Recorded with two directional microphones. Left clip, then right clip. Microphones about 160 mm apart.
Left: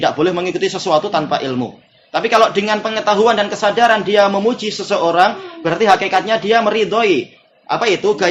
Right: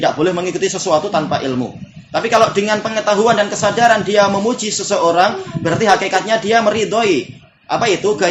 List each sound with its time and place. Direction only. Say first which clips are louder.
0.0 s a man's voice: even; 30° left (ahead or behind)